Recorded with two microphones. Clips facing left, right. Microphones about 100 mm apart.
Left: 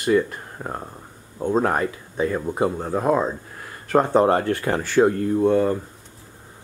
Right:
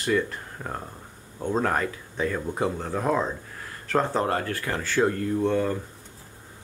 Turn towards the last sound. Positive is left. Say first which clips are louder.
# left 5 dB
turn(degrees=15)  # may be behind; listen again after turning